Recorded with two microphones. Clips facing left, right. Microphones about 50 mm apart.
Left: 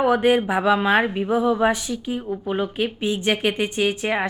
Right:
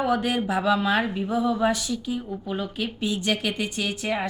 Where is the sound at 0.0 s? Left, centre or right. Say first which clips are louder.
Left 6 dB; left.